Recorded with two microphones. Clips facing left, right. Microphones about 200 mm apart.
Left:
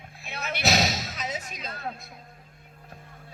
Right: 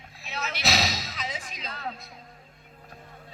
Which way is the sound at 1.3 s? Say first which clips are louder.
Left 3 dB; 45° left (ahead or behind).